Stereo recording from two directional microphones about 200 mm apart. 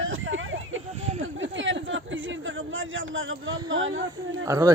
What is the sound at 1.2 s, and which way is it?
A man's voice, 70° right (ahead or behind).